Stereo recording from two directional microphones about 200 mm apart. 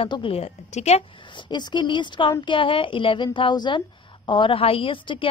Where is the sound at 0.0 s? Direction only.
25° left (ahead or behind).